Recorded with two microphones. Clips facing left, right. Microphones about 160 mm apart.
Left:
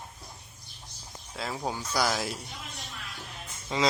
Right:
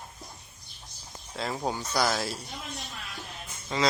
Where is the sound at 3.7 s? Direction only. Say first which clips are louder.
Even; 15° left (ahead or behind).